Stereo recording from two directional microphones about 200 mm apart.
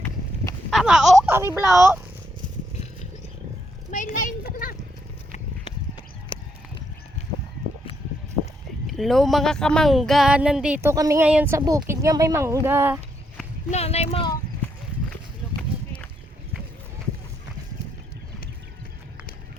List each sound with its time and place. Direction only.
0.7 s speech: centre (ahead or behind)
3.9 s a sound: 40° left (ahead or behind)
8.9 s speech: centre (ahead or behind)
13.7 s speech: 30° left (ahead or behind)